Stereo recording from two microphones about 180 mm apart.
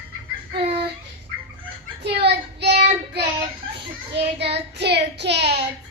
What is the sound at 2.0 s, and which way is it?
Child singing, 65° right (ahead or behind).